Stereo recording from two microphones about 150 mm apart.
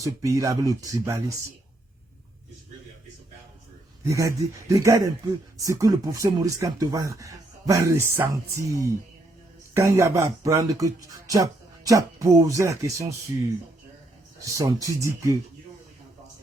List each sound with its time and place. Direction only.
0.0 s speech: 20° right (ahead or behind)
4.0 s speech: 20° right (ahead or behind)
14.4 s speech: 20° right (ahead or behind)